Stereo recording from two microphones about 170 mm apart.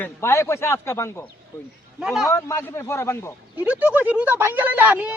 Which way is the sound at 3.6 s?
10° right (ahead or behind).